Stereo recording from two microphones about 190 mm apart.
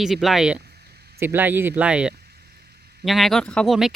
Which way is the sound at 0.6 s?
60° right (ahead or behind).